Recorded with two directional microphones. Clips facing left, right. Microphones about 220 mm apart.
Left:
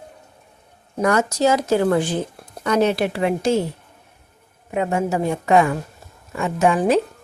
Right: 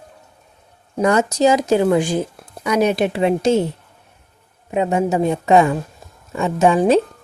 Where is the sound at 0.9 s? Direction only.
20° right (ahead or behind).